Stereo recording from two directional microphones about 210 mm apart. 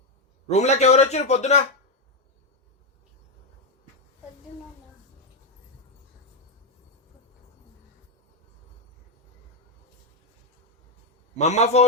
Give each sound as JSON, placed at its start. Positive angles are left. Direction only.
{"t": 0.4, "sound": "a man's voice", "side_deg": 30}
{"t": 11.3, "sound": "a man's voice", "side_deg": 35}